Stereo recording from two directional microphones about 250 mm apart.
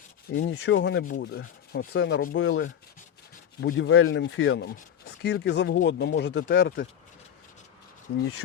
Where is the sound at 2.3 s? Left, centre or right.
Left.